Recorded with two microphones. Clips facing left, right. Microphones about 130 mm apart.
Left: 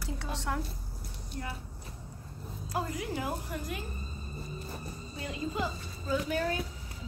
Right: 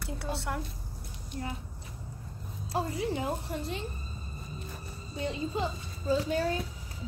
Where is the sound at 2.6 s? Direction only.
30° right (ahead or behind).